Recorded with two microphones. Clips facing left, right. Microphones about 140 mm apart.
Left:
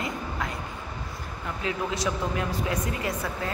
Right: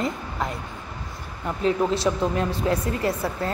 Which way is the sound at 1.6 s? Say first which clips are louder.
Right 7 dB; 30° right (ahead or behind).